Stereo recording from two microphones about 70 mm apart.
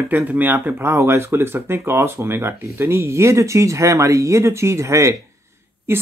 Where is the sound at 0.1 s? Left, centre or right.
Right.